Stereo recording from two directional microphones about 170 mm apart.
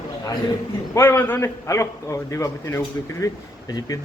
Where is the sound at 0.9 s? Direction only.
15° left (ahead or behind).